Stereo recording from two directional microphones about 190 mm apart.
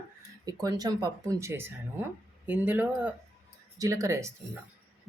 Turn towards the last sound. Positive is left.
turn(degrees=-15)  # may be behind; listen again after turning